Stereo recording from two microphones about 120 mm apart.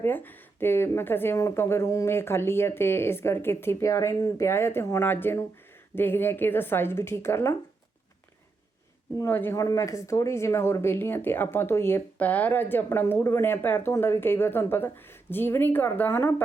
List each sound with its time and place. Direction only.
0.0 s a woman's voice: 15° left (ahead or behind)
9.2 s speech: 20° left (ahead or behind)